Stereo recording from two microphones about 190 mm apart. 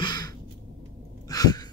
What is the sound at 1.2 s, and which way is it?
Sigh, 20° left (ahead or behind).